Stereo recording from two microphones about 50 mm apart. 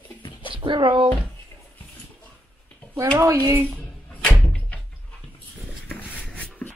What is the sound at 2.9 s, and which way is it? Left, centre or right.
Speech, right.